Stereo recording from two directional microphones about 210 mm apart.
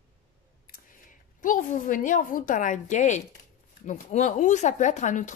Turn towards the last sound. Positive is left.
turn(degrees=35)  # may be behind; listen again after turning